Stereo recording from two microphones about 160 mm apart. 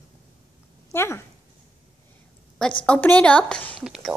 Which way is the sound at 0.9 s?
15° left (ahead or behind).